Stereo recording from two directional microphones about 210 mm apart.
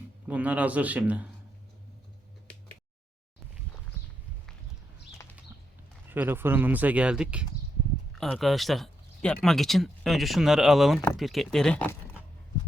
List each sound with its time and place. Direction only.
0.3 s speech: 5° right (ahead or behind)
6.1 s speech: 10° right (ahead or behind); by 11.9 s 5° left (ahead or behind)